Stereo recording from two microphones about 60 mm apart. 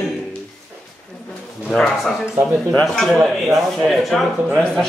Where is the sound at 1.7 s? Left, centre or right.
Centre.